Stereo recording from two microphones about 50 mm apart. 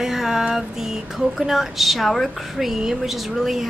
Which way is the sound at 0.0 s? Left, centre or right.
Centre.